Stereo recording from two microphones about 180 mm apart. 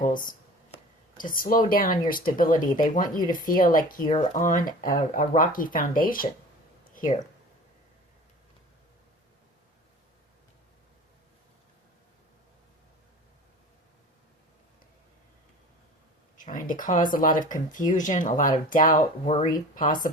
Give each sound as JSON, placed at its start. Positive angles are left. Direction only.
{"t": 0.0, "sound": "speech", "side_deg": 50}
{"t": 16.4, "sound": "speech", "side_deg": 45}